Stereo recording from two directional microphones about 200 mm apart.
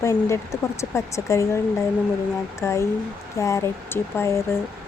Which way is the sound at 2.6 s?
15° left (ahead or behind).